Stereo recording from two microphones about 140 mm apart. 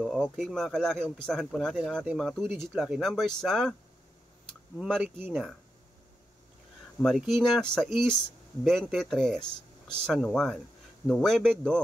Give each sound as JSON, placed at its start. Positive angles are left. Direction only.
{"t": 0.0, "sound": "speech", "side_deg": 0}
{"t": 2.4, "sound": "speech", "side_deg": -15}
{"t": 2.7, "sound": "speech", "side_deg": 0}
{"t": 4.7, "sound": "speech", "side_deg": 5}
{"t": 5.0, "sound": "speech", "side_deg": -15}
{"t": 7.0, "sound": "speech", "side_deg": 0}